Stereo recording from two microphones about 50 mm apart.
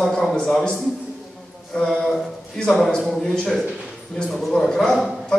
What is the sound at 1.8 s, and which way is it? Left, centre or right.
A man's voice, centre.